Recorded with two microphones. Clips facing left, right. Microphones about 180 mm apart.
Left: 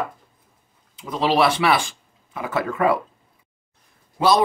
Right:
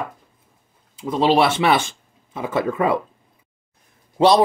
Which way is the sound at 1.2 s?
25° right (ahead or behind).